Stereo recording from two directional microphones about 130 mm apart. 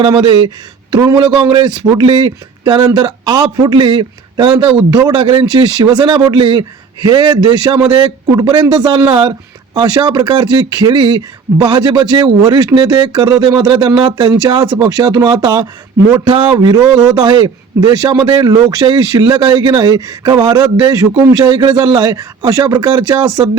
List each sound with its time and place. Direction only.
0.1 s a man's voice: 35° right (ahead or behind)
4.9 s a man's voice: 30° right (ahead or behind)